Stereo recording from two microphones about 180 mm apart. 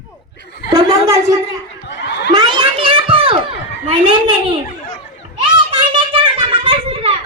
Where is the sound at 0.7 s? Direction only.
20° right (ahead or behind).